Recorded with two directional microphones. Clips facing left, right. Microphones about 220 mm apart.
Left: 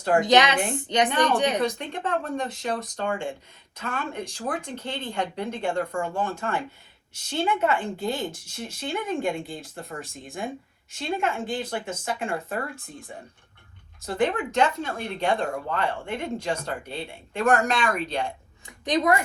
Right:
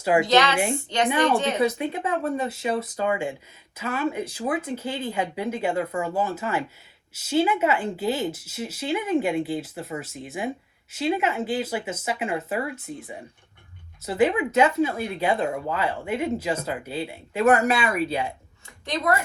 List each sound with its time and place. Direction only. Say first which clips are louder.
0.0 s a woman's voice: right 1 dB; 5° right (ahead or behind)
0.3 s a woman's voice: even; 20° left (ahead or behind)
1.5 s speech: right 3 dB; 5° right (ahead or behind)
14.0 s speech: right 3 dB; 5° right (ahead or behind)
18.9 s a woman's voice: left 3 dB; 20° left (ahead or behind)